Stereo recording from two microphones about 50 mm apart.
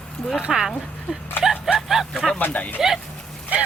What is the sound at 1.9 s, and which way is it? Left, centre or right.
Speech, centre.